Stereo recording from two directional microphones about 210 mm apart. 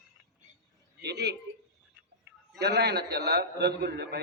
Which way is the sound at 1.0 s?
55° right (ahead or behind).